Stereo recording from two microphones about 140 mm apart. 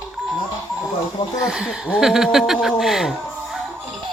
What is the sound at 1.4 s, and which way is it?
Speech, 5° right (ahead or behind).